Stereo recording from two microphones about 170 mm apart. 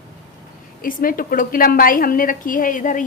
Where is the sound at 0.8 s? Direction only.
55° left (ahead or behind).